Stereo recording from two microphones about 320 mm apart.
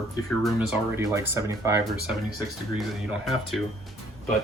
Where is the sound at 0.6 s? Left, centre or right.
Centre.